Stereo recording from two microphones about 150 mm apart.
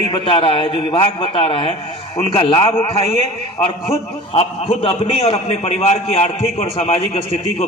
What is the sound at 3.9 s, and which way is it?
A man's voice, 40° left (ahead or behind).